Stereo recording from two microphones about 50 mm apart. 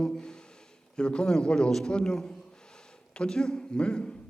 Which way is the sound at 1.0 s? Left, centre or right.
Centre.